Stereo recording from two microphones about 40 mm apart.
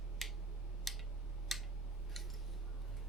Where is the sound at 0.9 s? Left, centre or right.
Centre.